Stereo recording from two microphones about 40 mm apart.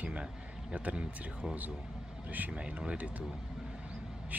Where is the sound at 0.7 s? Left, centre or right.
Right.